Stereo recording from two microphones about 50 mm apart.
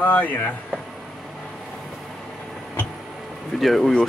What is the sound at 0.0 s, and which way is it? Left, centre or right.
Speech, left.